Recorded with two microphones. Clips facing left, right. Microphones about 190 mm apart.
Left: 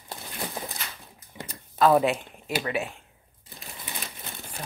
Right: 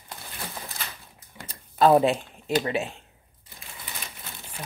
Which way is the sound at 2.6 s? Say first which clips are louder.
Right 2 dB; 25° right (ahead or behind).